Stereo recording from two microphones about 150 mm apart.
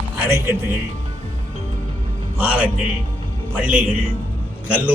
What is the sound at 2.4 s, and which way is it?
A man's voice, 10° right (ahead or behind).